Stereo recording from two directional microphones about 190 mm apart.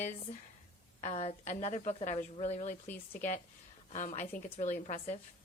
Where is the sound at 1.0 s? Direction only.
35° left (ahead or behind).